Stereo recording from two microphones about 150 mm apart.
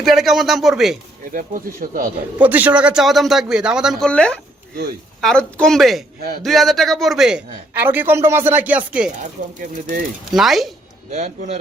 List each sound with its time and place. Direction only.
0.0 s a man's voice: centre (ahead or behind)
1.3 s speech: 65° right (ahead or behind)
2.4 s a man's voice: 10° right (ahead or behind)
9.6 s speech: 60° right (ahead or behind)
10.3 s a man's voice: centre (ahead or behind)
11.1 s speech: 45° right (ahead or behind)